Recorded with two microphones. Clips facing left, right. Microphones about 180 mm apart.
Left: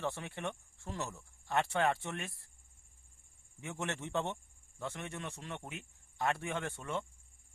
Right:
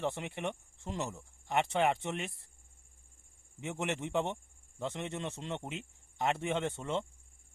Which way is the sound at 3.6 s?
20° right (ahead or behind).